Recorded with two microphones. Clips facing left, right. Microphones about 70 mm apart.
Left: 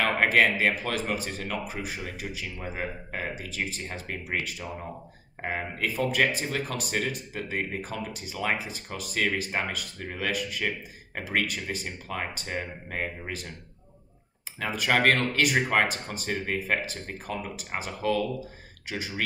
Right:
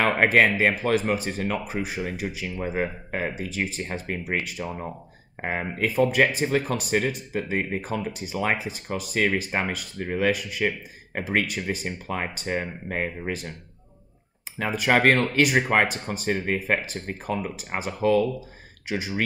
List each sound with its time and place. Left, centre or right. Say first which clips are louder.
0.0 s speech: right 3 dB; right
14.6 s speech: right 4 dB; right